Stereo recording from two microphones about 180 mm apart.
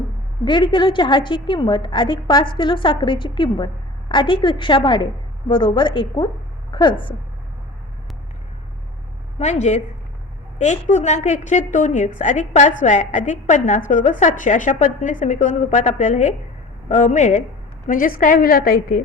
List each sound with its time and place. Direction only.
0.4 s a woman's voice: 25° left (ahead or behind)
9.4 s a woman's voice: 40° left (ahead or behind)